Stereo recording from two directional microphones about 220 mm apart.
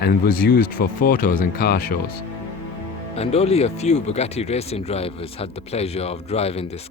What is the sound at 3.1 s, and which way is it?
Speech, 30° left (ahead or behind).